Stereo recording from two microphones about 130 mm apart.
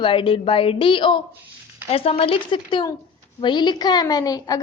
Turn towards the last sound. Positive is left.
turn(degrees=30)  # may be behind; listen again after turning